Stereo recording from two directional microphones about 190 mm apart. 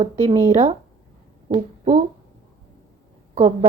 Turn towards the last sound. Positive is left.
turn(degrees=-35)  # may be behind; listen again after turning